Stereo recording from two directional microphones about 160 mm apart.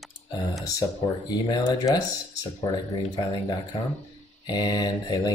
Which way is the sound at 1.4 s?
25° left (ahead or behind).